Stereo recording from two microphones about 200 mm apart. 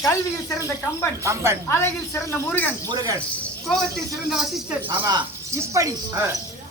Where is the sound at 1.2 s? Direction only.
15° right (ahead or behind).